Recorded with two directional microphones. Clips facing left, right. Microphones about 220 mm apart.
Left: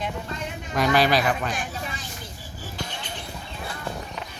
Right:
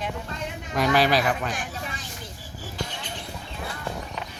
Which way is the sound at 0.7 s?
5° right (ahead or behind).